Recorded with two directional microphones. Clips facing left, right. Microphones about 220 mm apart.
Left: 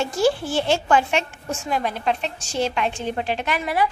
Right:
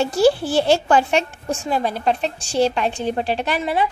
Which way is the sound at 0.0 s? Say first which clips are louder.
Right 4 dB; 35° right (ahead or behind).